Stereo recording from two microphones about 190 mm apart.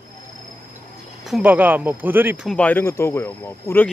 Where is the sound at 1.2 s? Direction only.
5° right (ahead or behind).